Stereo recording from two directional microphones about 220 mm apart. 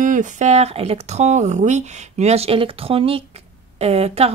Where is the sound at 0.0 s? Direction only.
35° right (ahead or behind).